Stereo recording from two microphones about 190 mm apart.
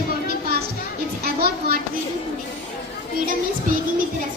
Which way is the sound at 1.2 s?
55° right (ahead or behind).